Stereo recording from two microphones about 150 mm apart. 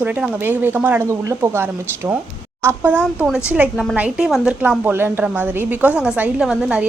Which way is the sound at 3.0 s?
5° right (ahead or behind).